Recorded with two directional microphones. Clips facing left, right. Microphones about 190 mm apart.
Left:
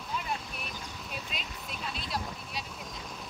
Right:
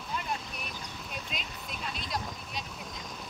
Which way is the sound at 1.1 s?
Centre (ahead or behind).